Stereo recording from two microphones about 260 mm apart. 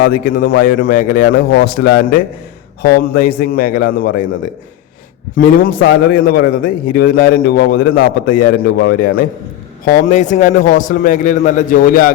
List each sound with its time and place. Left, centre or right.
0.0 s a man's voice: left
5.4 s a man's voice: left